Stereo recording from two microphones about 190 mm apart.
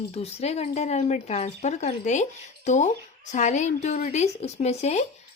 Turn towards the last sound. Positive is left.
turn(degrees=35)  # may be behind; listen again after turning